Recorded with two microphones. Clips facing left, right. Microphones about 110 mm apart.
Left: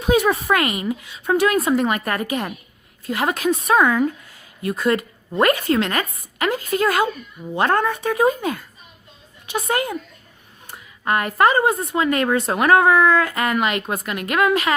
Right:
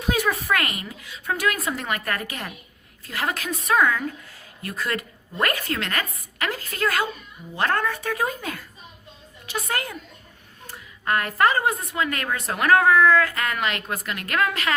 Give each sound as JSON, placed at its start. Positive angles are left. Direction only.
{"t": 0.1, "sound": "a woman's voice", "side_deg": 20}